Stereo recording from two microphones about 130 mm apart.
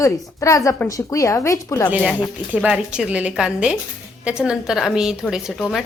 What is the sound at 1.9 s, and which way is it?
A woman's voice, 10° right (ahead or behind).